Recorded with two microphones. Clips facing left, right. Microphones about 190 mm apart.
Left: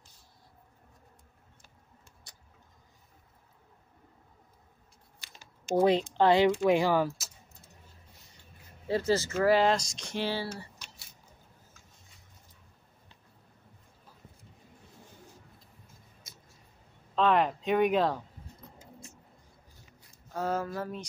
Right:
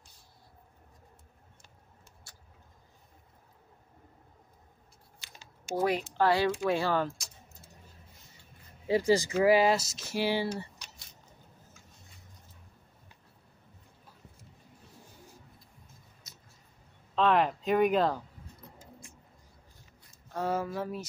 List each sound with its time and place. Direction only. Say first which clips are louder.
2.3 s vehicle: even; 20° left (ahead or behind)
5.8 s speech: left 4 dB; 25° left (ahead or behind); by 7.2 s 10° left (ahead or behind)
8.8 s speech: right 2 dB; 15° right (ahead or behind)
17.1 s speech: even; centre (ahead or behind)
20.3 s speech: even; 5° right (ahead or behind)